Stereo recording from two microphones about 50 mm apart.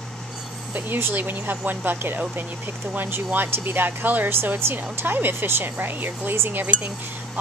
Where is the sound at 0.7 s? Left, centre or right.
Right.